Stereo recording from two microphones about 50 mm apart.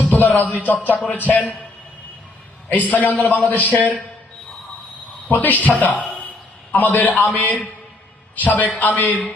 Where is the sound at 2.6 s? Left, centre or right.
Left.